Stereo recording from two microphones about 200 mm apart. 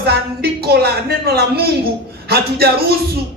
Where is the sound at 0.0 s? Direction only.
50° right (ahead or behind).